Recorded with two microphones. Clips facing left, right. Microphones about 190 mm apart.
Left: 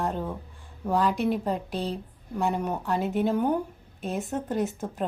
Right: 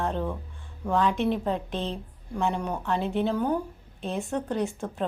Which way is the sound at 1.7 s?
40° left (ahead or behind).